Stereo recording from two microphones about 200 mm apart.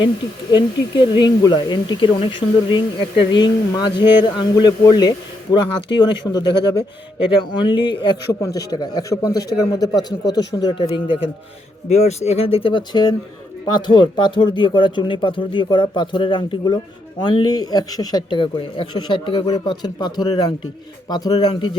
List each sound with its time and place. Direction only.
0.5 s speech: 25° left (ahead or behind)